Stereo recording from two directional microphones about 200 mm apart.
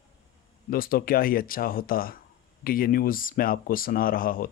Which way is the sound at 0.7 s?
45° left (ahead or behind).